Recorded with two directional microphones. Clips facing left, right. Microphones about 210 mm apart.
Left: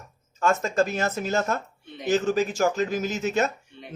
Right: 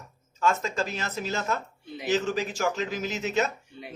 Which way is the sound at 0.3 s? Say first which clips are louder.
Left 4 dB; 45° left (ahead or behind).